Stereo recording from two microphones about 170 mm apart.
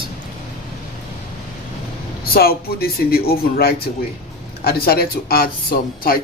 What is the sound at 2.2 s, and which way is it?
A man's voice, 65° left (ahead or behind).